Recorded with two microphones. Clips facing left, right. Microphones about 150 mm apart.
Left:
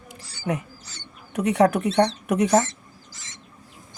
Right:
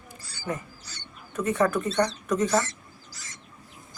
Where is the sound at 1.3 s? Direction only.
70° left (ahead or behind).